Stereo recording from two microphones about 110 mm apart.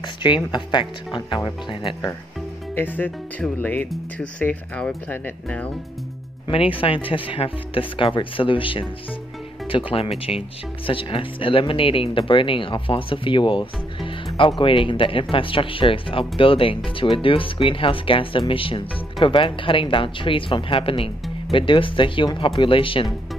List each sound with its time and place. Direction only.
0.5 s speech: 45° left (ahead or behind)
2.7 s speech: 15° left (ahead or behind)
6.5 s speech: 55° left (ahead or behind)